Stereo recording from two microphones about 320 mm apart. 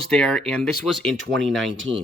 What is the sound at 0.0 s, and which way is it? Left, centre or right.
Speech, centre.